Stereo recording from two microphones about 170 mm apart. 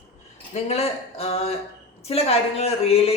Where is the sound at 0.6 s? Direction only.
35° left (ahead or behind).